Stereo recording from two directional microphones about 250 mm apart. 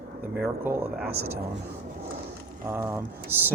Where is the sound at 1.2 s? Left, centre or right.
Right.